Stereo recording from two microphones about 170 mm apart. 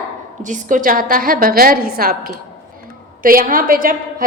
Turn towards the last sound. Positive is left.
turn(degrees=-55)  # may be behind; listen again after turning